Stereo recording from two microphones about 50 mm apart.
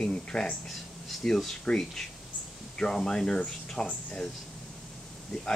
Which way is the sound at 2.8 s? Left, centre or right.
Centre.